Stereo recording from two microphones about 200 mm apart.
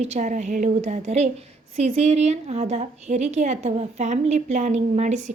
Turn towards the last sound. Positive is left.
turn(degrees=-35)  # may be behind; listen again after turning